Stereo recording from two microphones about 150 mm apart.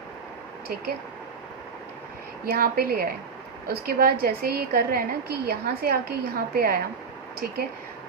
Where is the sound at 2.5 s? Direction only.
80° right.